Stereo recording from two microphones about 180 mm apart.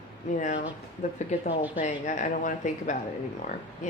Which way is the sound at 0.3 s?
45° left (ahead or behind).